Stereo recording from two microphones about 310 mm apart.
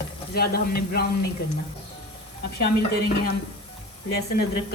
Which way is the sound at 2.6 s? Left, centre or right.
Left.